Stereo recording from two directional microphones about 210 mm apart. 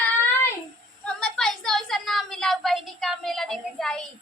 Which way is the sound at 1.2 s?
5° left (ahead or behind).